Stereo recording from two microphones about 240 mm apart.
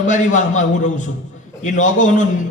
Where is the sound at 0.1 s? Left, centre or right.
Left.